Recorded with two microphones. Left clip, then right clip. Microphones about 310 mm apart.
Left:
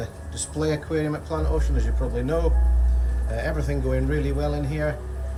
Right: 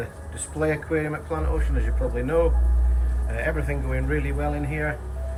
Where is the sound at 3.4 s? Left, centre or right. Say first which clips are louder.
Right 1 dB; centre.